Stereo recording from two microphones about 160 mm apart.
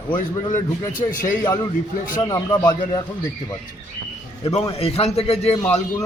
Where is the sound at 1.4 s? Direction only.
20° left (ahead or behind).